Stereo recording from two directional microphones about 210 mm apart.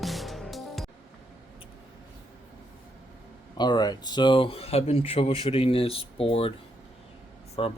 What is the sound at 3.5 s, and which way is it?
Speech, 20° left (ahead or behind).